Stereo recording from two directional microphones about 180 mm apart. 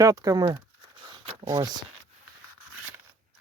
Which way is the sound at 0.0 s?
20° right (ahead or behind).